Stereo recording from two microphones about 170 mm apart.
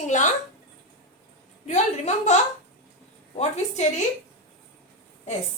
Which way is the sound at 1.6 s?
40° left (ahead or behind).